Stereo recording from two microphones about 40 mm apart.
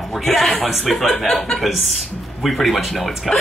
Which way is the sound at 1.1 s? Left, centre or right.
Centre.